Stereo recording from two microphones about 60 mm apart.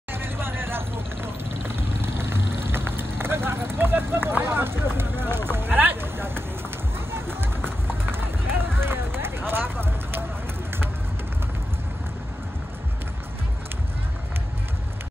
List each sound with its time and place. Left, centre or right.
0.1 s vehicle: right
7.1 s run: right
9.5 s a sound: right